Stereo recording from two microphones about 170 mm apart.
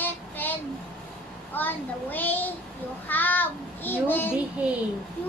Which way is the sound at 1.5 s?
10° left (ahead or behind).